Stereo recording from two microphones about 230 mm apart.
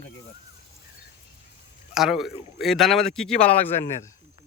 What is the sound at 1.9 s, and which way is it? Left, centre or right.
A man's voice, centre.